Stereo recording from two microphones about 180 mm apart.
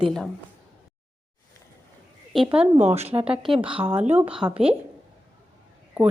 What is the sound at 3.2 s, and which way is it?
Speech, 5° right (ahead or behind).